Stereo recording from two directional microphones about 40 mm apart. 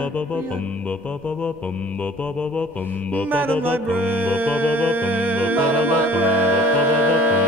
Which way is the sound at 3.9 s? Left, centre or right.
Right.